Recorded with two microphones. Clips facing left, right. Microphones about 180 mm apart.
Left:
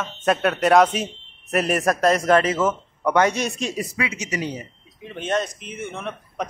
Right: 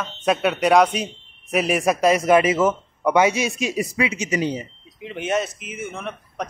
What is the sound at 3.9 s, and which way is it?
Speech, 20° right (ahead or behind).